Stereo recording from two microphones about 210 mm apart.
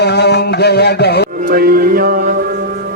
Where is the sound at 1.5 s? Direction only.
45° right (ahead or behind).